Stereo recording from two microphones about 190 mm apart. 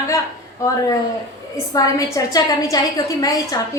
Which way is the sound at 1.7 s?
20° left (ahead or behind).